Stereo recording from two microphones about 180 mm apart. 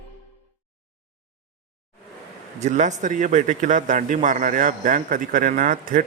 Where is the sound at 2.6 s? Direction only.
40° right (ahead or behind).